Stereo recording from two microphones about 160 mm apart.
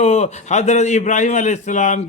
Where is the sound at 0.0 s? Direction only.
45° left (ahead or behind).